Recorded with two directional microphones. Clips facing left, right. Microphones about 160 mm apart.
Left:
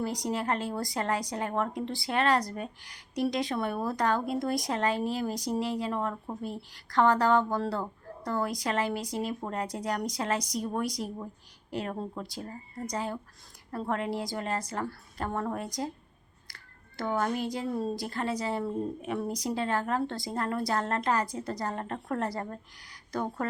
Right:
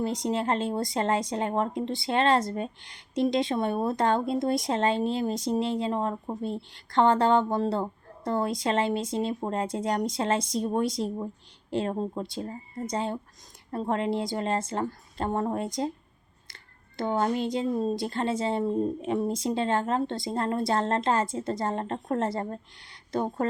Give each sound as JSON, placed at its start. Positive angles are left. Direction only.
{"t": 0.0, "sound": "speech", "side_deg": -20}
{"t": 17.0, "sound": "speech", "side_deg": -25}